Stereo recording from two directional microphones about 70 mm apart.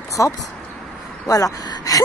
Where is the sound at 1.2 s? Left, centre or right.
Left.